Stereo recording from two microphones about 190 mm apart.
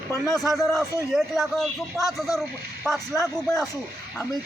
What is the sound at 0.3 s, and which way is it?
A man's voice, centre (ahead or behind).